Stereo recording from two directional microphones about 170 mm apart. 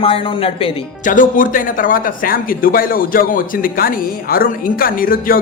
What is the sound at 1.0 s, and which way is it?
Speech, 50° left (ahead or behind).